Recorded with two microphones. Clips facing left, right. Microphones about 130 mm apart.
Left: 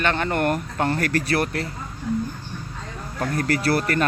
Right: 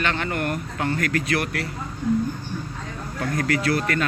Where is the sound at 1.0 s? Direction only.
35° left (ahead or behind).